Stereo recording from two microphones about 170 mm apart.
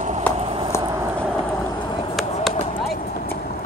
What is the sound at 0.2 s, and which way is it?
Walk, 15° left (ahead or behind).